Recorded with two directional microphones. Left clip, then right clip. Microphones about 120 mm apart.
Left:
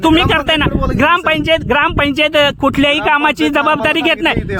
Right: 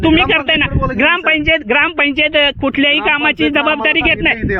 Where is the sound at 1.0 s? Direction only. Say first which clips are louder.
Even; 35° left (ahead or behind).